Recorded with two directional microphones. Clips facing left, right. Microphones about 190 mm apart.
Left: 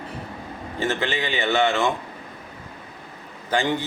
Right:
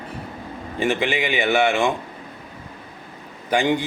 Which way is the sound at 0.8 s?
15° right (ahead or behind).